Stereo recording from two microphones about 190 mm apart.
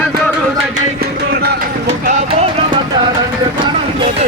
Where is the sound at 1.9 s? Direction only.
35° right (ahead or behind).